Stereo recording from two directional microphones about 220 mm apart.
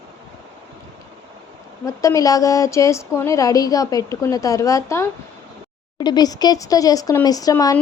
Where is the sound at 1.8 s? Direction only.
15° left (ahead or behind).